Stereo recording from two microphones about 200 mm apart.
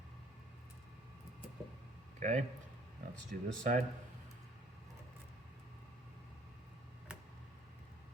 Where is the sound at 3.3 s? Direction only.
45° right (ahead or behind).